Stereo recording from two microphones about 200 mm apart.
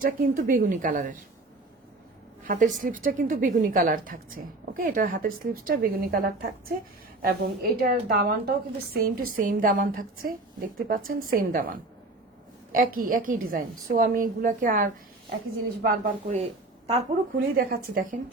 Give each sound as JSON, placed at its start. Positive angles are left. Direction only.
{"t": 0.0, "sound": "a woman's voice", "side_deg": -45}
{"t": 2.5, "sound": "a woman's voice", "side_deg": -40}
{"t": 17.3, "sound": "a woman's voice", "side_deg": -45}